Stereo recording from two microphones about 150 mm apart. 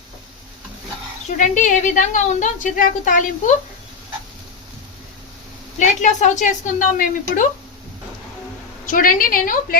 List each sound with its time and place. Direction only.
1.4 s a woman's voice: 55° left (ahead or behind)
5.8 s a woman's voice: 55° left (ahead or behind)
8.9 s a woman's voice: 65° left (ahead or behind)